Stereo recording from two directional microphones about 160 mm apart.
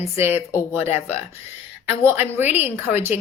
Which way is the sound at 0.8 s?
40° left (ahead or behind).